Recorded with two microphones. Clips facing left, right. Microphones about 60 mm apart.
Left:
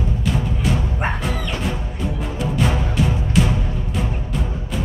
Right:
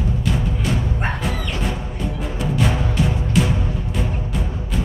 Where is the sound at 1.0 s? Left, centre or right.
Centre.